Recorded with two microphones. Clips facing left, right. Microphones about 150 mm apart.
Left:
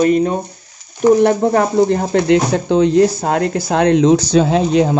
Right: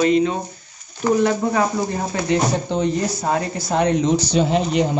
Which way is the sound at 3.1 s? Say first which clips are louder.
Left 5 dB; 70° left (ahead or behind).